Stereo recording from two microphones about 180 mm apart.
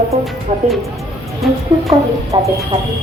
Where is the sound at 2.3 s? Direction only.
30° right (ahead or behind).